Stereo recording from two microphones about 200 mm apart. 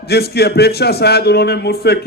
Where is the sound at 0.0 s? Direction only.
50° left (ahead or behind).